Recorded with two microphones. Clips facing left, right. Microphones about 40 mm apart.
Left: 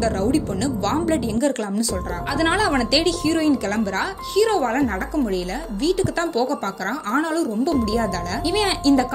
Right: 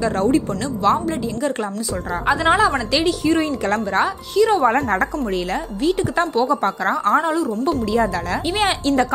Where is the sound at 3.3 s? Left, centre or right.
Right.